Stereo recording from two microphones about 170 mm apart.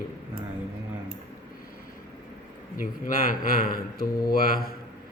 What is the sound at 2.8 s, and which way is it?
Speech, 55° left (ahead or behind).